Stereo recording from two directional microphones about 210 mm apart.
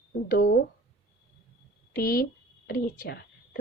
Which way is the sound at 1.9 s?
45° left (ahead or behind).